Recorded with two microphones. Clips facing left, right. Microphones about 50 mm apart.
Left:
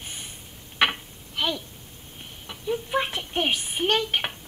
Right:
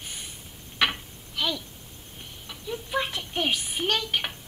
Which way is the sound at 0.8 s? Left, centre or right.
Left.